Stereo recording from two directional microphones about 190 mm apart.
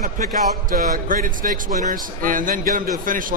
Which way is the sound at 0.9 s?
45° right (ahead or behind).